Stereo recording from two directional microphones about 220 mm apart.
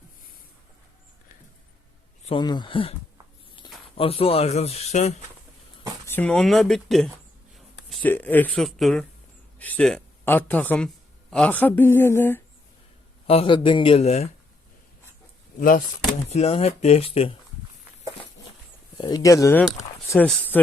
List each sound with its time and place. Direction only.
2.2 s speech: 20° left (ahead or behind)
3.9 s speech: 25° left (ahead or behind)
6.1 s a man's voice: 5° left (ahead or behind)
13.2 s speech: 25° left (ahead or behind)
15.5 s speech: 40° left (ahead or behind)
16.3 s speech: 25° left (ahead or behind)
18.9 s speech: 20° left (ahead or behind)